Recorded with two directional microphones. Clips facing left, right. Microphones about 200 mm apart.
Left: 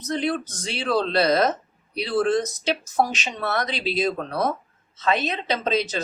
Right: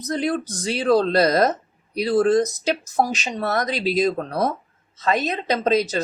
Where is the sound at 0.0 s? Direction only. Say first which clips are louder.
Right 2 dB; 40° right (ahead or behind).